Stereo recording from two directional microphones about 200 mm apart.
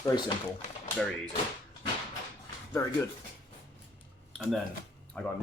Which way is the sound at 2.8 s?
15° left (ahead or behind).